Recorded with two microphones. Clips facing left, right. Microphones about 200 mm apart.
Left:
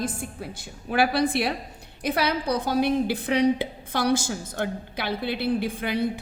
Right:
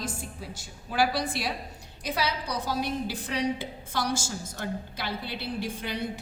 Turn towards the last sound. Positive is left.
turn(degrees=55)  # may be behind; listen again after turning